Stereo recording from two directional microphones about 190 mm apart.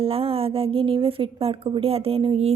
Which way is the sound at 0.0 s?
30° right (ahead or behind).